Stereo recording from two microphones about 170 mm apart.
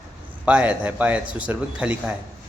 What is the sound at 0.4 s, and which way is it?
A man's voice, 5° right (ahead or behind).